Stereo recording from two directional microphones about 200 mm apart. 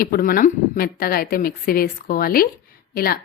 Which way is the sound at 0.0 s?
45° left (ahead or behind).